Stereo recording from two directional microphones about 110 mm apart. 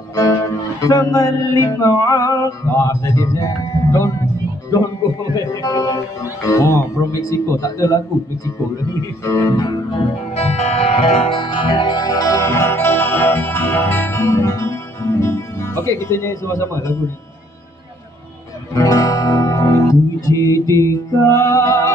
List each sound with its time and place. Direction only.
0.1 s music: 30° left (ahead or behind)
5.0 s a sound: 35° left (ahead or behind)
5.4 s music: 30° left (ahead or behind)
9.2 s music: 30° left (ahead or behind)
10.3 s music: 75° left (ahead or behind); by 16.9 s 25° left (ahead or behind)
18.8 s music: 30° left (ahead or behind)